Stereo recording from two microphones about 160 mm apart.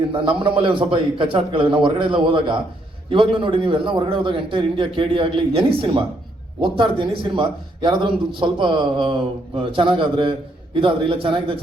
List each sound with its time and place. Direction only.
0.1 s a man's voice: 30° right (ahead or behind)